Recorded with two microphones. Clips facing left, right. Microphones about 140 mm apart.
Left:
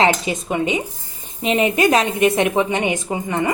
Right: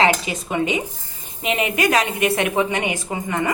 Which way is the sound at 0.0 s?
20° left (ahead or behind).